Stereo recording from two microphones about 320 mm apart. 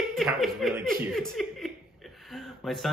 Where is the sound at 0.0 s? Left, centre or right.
Centre.